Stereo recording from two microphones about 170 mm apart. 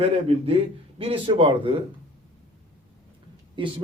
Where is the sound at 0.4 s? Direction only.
35° right (ahead or behind).